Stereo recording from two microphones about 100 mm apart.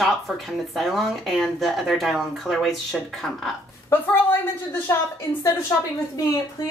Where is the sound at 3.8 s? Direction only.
20° left (ahead or behind).